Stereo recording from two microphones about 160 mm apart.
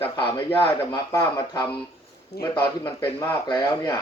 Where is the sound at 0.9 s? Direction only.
20° left (ahead or behind).